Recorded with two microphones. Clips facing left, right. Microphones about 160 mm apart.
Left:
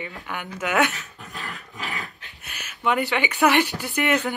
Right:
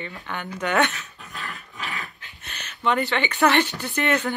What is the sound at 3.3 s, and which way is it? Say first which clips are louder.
Speech: even; 10° left (ahead or behind).